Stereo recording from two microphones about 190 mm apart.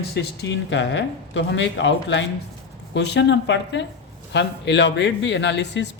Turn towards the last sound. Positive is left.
turn(degrees=65)  # may be behind; listen again after turning